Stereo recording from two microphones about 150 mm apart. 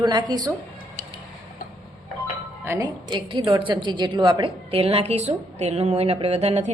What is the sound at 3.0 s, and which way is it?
A woman's voice, 30° right (ahead or behind).